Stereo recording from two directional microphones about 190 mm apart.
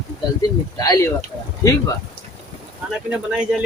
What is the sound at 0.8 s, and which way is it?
Speech, 15° left (ahead or behind).